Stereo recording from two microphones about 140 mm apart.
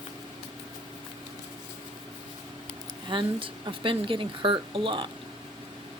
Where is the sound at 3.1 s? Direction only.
35° right (ahead or behind).